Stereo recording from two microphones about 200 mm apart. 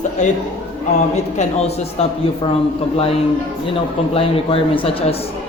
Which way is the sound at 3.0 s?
30° left (ahead or behind).